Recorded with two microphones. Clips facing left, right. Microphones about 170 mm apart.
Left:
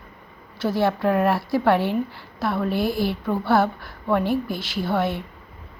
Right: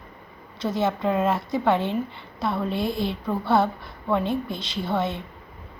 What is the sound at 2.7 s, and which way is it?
A woman's voice, 25° right (ahead or behind).